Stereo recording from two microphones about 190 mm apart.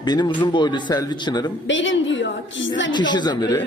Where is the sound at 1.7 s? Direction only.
80° left.